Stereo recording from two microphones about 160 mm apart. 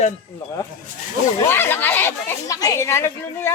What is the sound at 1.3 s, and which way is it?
Speech, 15° left (ahead or behind).